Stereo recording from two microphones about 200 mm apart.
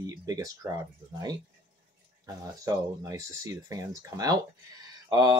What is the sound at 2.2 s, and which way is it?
Speech, 20° right (ahead or behind).